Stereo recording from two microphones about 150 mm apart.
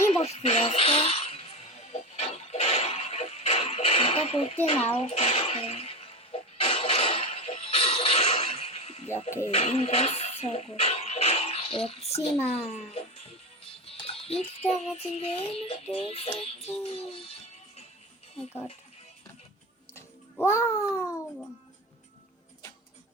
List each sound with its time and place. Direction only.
0.2 s music: 45° left (ahead or behind)
9.5 s a child's voice: 40° left (ahead or behind)
13.8 s music: 40° left (ahead or behind)
19.9 s babbling: 15° left (ahead or behind)